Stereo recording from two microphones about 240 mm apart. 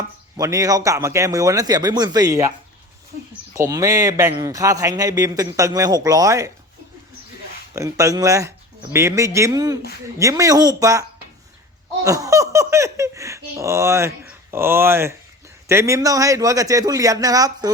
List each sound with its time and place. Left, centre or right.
0.3 s speech: centre
3.5 s speech: centre
7.8 s speech: centre
12.0 s speech: centre